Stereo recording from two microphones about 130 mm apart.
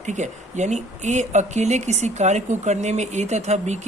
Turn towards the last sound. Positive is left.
turn(degrees=-60)  # may be behind; listen again after turning